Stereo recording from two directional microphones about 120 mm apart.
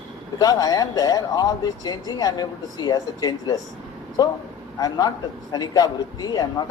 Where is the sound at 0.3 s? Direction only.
35° left (ahead or behind).